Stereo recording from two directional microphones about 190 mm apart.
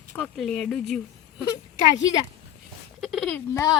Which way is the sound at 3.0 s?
Centre (ahead or behind).